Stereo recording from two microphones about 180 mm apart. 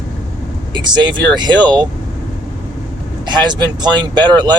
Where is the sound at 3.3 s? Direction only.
25° right (ahead or behind).